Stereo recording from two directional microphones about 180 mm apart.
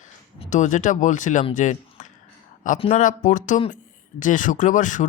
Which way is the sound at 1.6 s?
45° left (ahead or behind).